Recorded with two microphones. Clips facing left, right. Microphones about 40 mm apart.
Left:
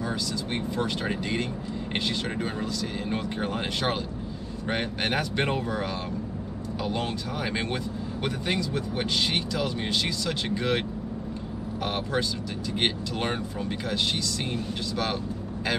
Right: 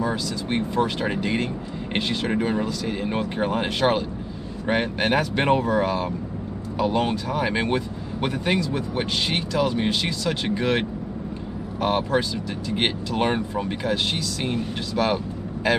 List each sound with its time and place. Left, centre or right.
0.0 s speech: centre